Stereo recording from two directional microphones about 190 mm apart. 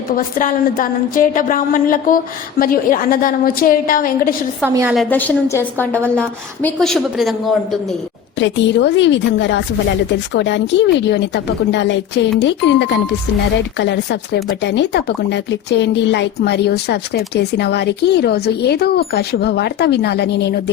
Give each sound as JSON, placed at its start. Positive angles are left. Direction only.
{"t": 0.3, "sound": "a woman's voice", "side_deg": 45}
{"t": 4.6, "sound": "a woman's voice", "side_deg": -10}
{"t": 4.9, "sound": "a woman's voice", "side_deg": 10}
{"t": 8.4, "sound": "a woman's voice", "side_deg": 75}